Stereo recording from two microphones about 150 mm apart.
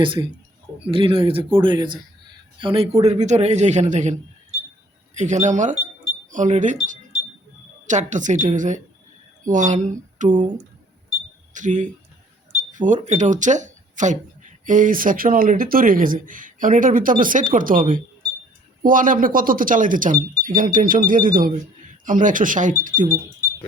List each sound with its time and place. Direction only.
0.0 s a man's voice: 35° right (ahead or behind); by 4.1 s 50° right (ahead or behind)
5.1 s a man's voice: 55° right (ahead or behind)
11.5 s speech: 55° right (ahead or behind)